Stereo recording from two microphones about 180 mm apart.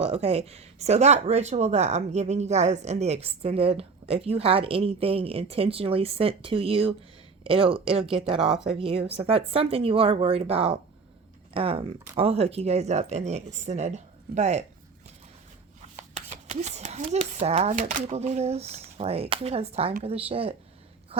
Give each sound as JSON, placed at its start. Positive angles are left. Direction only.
{"t": 0.0, "sound": "speech", "side_deg": -35}
{"t": 16.1, "sound": "speech", "side_deg": -35}